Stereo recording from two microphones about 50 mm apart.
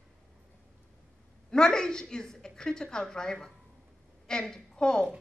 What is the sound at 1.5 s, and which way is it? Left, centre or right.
A woman's voice, centre.